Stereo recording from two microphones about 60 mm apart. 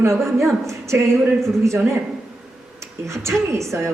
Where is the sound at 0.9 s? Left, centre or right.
Right.